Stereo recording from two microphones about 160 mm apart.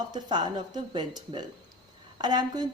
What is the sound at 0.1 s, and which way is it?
A woman's voice, 25° right (ahead or behind).